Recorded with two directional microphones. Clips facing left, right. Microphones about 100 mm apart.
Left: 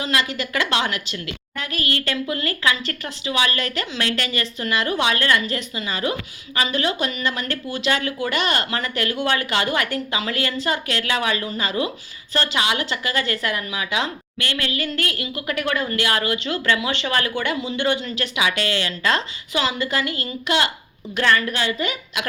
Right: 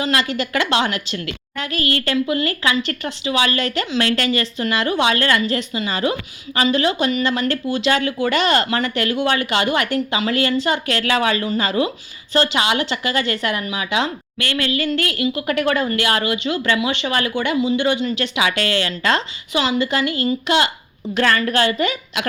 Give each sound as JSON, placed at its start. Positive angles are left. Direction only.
{"t": 0.0, "sound": "a woman's voice", "side_deg": -30}
{"t": 1.8, "sound": "a woman's voice", "side_deg": 30}
{"t": 2.2, "sound": "speech", "side_deg": -20}
{"t": 18.4, "sound": "a woman's voice", "side_deg": 25}
{"t": 18.7, "sound": "a woman's voice", "side_deg": -30}